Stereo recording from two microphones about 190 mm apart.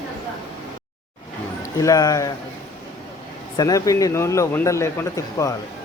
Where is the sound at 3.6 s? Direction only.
20° left (ahead or behind).